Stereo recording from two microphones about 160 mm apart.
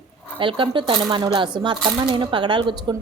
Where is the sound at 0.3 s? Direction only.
30° right (ahead or behind).